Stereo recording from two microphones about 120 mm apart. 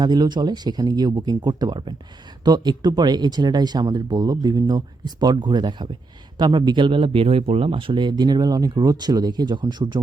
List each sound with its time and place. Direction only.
0.0 s speech: 35° right (ahead or behind)